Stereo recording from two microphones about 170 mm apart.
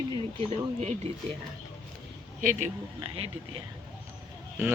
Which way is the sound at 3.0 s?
35° right (ahead or behind).